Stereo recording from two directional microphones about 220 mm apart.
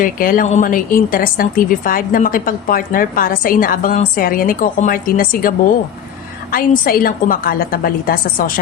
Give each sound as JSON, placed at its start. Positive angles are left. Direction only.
{"t": 0.0, "sound": "a woman's voice", "side_deg": 40}